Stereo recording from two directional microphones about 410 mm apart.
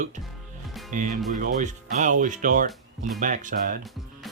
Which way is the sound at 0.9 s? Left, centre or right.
Centre.